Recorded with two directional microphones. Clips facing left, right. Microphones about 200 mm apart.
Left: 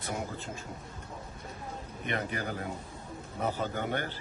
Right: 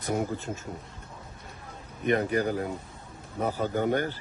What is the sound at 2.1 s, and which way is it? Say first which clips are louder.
A man's voice: right 9 dB; 40° right (ahead or behind).